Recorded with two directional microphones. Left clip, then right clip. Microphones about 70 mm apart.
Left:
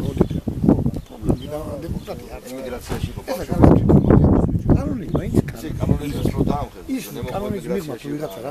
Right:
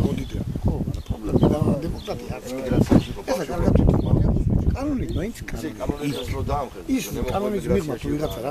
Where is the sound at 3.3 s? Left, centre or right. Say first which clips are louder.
Right 1 dB; centre.